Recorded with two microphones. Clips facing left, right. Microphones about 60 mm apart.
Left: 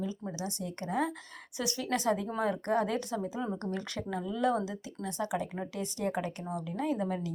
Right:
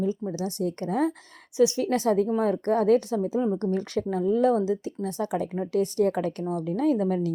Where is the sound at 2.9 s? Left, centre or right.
Right.